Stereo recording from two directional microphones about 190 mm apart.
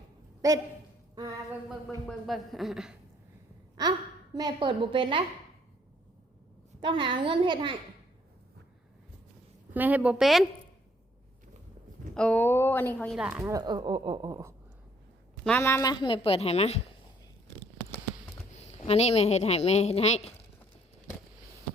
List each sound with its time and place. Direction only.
0.4 s a woman's voice: 20° right (ahead or behind)
2.0 s a woman's voice: centre (ahead or behind)
4.4 s speech: 25° right (ahead or behind)
6.7 s speech: 25° right (ahead or behind)
9.7 s a woman's voice: 10° right (ahead or behind)
12.1 s a woman's voice: 5° left (ahead or behind)
13.1 s a woman's voice: 5° right (ahead or behind)
13.4 s speech: 20° right (ahead or behind)
15.4 s a woman's voice: 10° left (ahead or behind); by 16.8 s 35° left (ahead or behind)
18.6 s a woman's voice: 35° left (ahead or behind)